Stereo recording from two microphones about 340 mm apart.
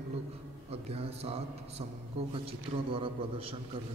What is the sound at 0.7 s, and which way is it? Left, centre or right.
Speech, centre.